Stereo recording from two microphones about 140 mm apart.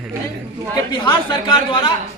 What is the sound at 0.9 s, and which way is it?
Speech, 35° left (ahead or behind).